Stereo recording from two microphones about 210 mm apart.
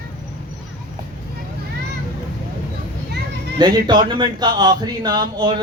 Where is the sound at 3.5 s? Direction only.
20° right (ahead or behind).